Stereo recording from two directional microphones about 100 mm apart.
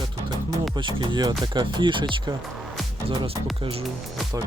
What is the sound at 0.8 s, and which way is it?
Speech, 50° right (ahead or behind).